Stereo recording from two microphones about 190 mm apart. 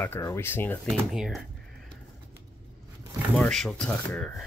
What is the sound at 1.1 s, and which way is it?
Speech, centre (ahead or behind).